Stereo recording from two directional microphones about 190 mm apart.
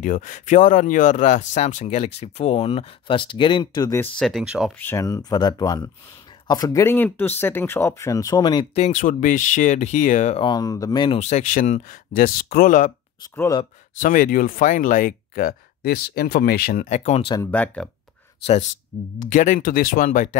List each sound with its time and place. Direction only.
0.0 s speech: 45° left (ahead or behind); by 4.1 s 15° left (ahead or behind)
4.2 s speech: centre (ahead or behind)
4.7 s speech: 15° left (ahead or behind)
8.7 s speech: 35° left (ahead or behind); by 11.1 s 20° left (ahead or behind)
11.1 s speech: 35° left (ahead or behind)
13.4 s speech: 20° left (ahead or behind)
14.0 s speech: 45° left (ahead or behind)
17.4 s speech: 10° left (ahead or behind)
18.4 s speech: 35° left (ahead or behind)